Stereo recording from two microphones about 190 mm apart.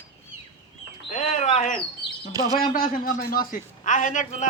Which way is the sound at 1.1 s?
35° left (ahead or behind).